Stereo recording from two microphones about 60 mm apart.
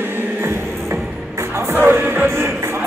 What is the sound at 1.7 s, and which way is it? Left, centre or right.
Music, right.